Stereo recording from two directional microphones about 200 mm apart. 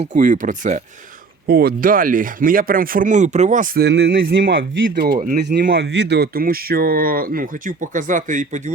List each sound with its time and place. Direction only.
0.0 s speech: 40° right (ahead or behind)
1.5 s speech: 50° right (ahead or behind)